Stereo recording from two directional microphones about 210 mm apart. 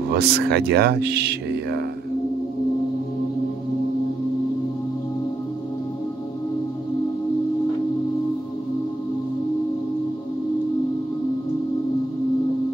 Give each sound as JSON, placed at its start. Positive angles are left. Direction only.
{"t": 0.1, "sound": "speech", "side_deg": -50}